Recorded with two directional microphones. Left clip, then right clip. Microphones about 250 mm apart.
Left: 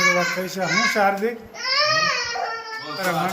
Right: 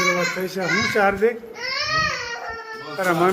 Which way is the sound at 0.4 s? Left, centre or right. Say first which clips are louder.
Left 1 dB; centre.